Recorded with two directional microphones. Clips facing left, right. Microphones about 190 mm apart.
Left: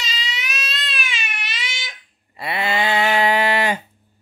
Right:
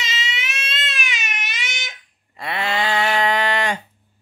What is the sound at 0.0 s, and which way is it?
Baby cry, 25° right (ahead or behind).